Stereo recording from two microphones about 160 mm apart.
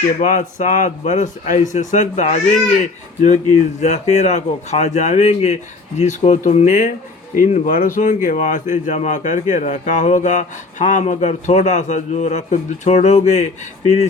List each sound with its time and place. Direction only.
0.2 s speech: 50° left (ahead or behind)